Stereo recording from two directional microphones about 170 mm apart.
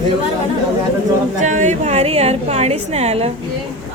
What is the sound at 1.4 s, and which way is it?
A woman's voice, 45° right (ahead or behind).